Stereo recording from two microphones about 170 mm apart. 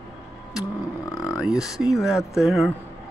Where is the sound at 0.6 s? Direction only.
20° left (ahead or behind).